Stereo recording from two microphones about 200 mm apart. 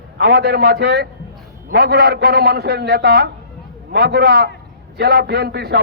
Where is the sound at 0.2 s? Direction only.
55° right (ahead or behind).